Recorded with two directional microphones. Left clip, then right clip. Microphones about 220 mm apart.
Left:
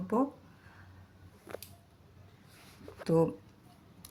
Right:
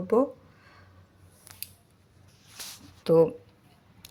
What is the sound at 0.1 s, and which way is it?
Speech, 20° right (ahead or behind).